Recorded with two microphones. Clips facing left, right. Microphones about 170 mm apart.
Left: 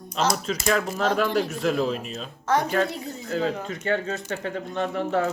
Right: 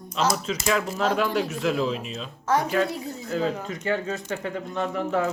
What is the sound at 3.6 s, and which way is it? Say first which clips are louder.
Speech: left 1 dB; 30° left (ahead or behind).